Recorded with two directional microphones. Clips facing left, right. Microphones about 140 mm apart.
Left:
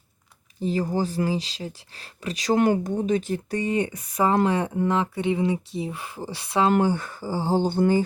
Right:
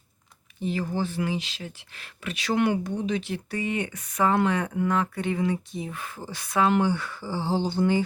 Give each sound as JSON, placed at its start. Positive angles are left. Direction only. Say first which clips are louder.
{"t": 0.6, "sound": "speech", "louder": "left 3 dB", "side_deg": 35}
{"t": 6.7, "sound": "speech", "louder": "left 4 dB", "side_deg": 45}